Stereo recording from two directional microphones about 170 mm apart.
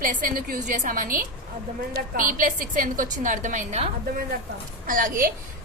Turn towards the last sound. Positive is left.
turn(degrees=-55)  # may be behind; listen again after turning